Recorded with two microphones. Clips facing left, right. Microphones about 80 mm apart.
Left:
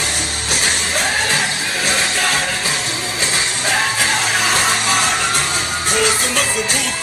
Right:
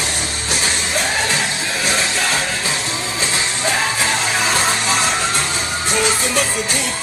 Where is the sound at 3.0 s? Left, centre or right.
Left.